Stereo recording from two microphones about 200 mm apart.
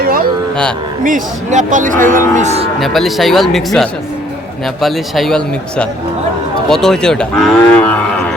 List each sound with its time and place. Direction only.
0.0 s music: 45° right (ahead or behind)
1.0 s speech: 40° right (ahead or behind)
2.8 s cattle: centre (ahead or behind)